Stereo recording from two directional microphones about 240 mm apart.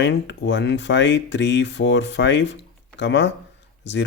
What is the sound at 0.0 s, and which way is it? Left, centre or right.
Speech, left.